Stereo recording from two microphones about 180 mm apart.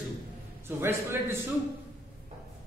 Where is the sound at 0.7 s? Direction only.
15° right (ahead or behind).